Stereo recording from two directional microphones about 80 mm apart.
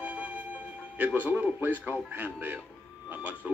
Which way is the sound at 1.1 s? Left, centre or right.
Right.